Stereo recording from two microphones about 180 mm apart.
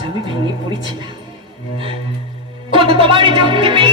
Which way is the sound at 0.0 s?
25° right (ahead or behind).